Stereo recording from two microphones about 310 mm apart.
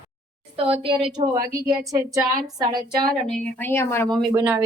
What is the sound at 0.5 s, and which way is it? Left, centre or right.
A woman's voice, centre.